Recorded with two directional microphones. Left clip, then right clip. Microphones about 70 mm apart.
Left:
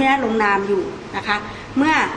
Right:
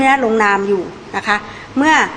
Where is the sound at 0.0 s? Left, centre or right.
Right.